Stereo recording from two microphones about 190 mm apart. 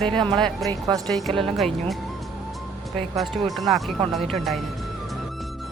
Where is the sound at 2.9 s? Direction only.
Centre (ahead or behind).